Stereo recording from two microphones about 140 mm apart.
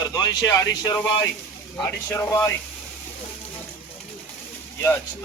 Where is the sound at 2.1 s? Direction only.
15° left (ahead or behind).